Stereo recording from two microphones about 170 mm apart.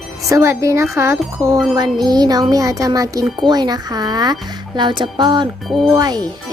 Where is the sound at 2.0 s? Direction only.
25° right (ahead or behind).